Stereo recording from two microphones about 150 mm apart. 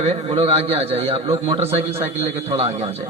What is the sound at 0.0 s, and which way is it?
A man's voice, 40° right (ahead or behind).